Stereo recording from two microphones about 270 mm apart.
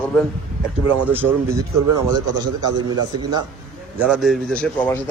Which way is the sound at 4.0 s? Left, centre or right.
Centre.